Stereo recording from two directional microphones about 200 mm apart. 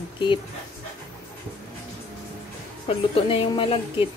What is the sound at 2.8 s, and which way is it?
A woman's voice, 25° left (ahead or behind).